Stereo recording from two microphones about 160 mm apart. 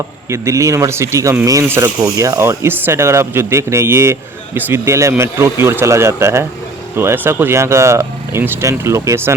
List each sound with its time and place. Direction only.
0.3 s speech: 20° right (ahead or behind)